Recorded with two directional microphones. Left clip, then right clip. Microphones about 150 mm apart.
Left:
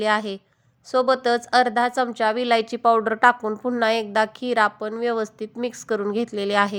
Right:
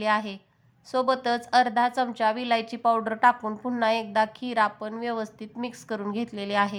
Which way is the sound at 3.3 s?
15° left (ahead or behind).